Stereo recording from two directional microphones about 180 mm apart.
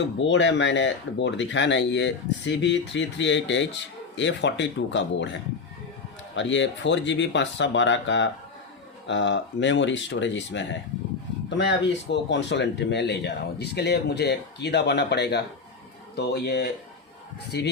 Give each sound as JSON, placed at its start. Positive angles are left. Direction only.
{"t": 0.2, "sound": "speech", "side_deg": 90}
{"t": 9.0, "sound": "speech", "side_deg": 80}
{"t": 11.4, "sound": "speech", "side_deg": 75}